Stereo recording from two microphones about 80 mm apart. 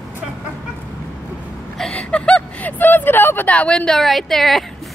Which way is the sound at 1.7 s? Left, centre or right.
Centre.